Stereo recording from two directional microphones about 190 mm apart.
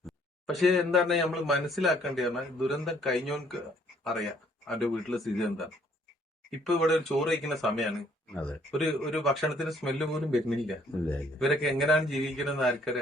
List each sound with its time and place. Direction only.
0.0 s speech: centre (ahead or behind)
6.7 s speech: centre (ahead or behind)